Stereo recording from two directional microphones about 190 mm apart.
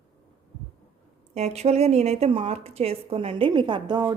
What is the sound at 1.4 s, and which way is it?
A woman's voice, 35° right (ahead or behind).